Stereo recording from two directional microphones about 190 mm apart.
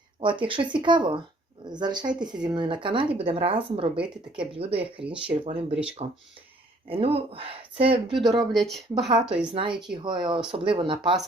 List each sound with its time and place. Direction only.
0.2 s speech: 25° right (ahead or behind)
8.5 s a woman's voice: centre (ahead or behind)
9.5 s speech: 25° right (ahead or behind)